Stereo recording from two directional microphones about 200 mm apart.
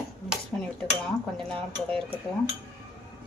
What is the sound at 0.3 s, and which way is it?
Dishes, 5° left (ahead or behind).